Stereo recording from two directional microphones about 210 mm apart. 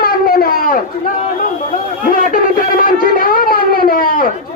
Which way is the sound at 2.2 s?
40° left (ahead or behind).